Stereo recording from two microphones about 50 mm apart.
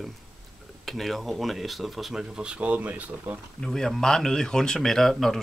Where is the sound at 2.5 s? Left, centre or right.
Right.